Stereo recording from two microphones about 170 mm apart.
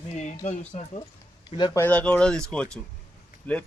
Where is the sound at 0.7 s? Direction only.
45° left (ahead or behind).